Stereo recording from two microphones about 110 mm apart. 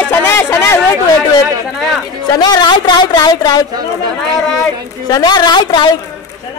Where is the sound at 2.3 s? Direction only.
40° left (ahead or behind).